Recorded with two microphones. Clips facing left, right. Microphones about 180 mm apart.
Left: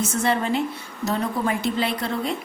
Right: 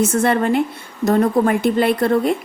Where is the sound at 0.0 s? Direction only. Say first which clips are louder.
Right 7 dB; 55° right (ahead or behind).